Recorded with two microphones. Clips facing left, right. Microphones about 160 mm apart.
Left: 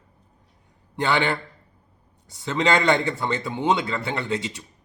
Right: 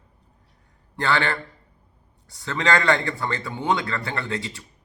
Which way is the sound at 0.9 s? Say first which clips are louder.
Left 1 dB; 20° left (ahead or behind).